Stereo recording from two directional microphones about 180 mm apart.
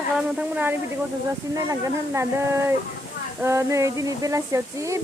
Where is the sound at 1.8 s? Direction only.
15° right (ahead or behind).